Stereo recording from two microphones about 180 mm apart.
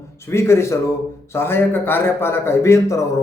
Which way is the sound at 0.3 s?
15° left (ahead or behind).